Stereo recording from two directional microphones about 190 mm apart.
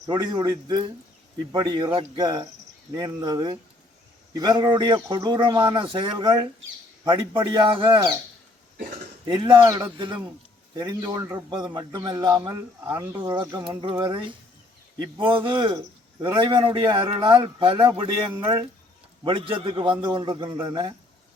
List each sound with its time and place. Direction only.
0.1 s a man's voice: 25° right (ahead or behind)
9.2 s a man's voice: 25° right (ahead or behind)